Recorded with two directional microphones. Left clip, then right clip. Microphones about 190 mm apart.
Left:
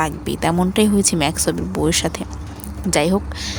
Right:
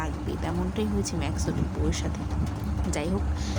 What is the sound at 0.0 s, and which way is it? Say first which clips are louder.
Speech: left 12 dB; 60° left (ahead or behind).